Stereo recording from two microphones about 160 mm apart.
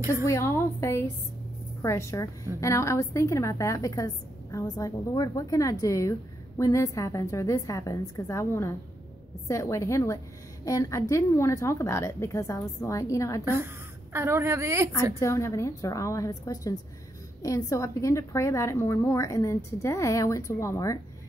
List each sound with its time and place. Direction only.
0.2 s a woman's voice: 20° left (ahead or behind)
14.1 s speech: 15° right (ahead or behind)
15.1 s a woman's voice: 20° left (ahead or behind)